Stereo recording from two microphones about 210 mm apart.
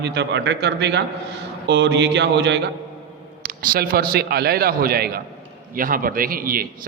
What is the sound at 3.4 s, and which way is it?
A man's voice, 45° right (ahead or behind).